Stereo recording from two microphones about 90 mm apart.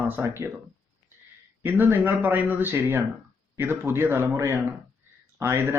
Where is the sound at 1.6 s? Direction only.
25° right (ahead or behind).